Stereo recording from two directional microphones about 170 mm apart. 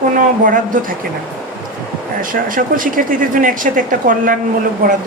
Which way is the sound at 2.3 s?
55° right (ahead or behind).